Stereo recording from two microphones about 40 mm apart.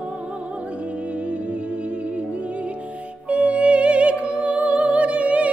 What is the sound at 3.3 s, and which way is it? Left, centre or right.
Music, right.